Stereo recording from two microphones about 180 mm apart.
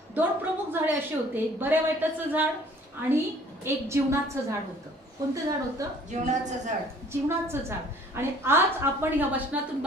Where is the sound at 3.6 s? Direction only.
15° right (ahead or behind).